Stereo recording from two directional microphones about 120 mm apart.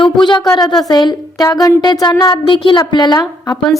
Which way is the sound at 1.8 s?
40° left (ahead or behind).